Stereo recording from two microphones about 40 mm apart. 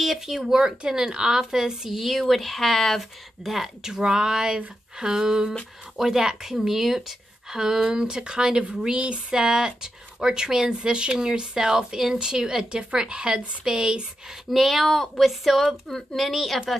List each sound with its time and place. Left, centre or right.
0.0 s speech: centre
3.8 s speech: centre
14.5 s speech: centre